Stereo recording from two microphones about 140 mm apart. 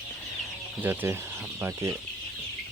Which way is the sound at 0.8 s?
15° right (ahead or behind).